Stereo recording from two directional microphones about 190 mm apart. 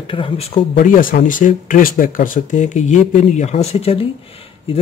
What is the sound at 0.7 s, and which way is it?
Speech, 45° left (ahead or behind).